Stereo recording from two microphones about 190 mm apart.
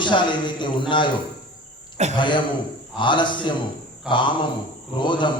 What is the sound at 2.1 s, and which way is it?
A man's voice, 25° left (ahead or behind).